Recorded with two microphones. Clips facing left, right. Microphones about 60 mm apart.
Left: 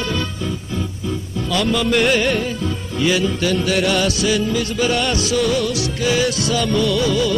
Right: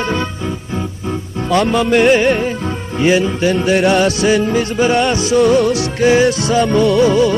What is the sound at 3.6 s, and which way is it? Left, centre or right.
Music, right.